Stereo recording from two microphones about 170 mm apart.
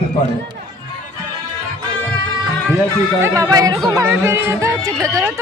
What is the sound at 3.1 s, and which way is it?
Speech, 15° right (ahead or behind).